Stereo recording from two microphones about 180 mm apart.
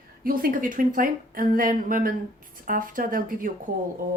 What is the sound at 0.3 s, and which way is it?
A woman's voice, 50° right (ahead or behind).